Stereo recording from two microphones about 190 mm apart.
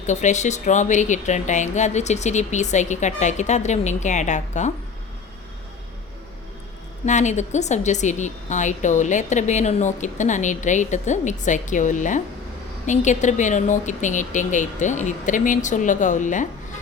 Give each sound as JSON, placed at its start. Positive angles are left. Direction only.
{"t": 0.0, "sound": "a woman's voice", "side_deg": 40}
{"t": 7.0, "sound": "a woman's voice", "side_deg": 40}